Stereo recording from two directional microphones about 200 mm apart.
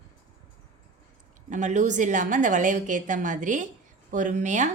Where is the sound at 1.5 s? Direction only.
40° right (ahead or behind).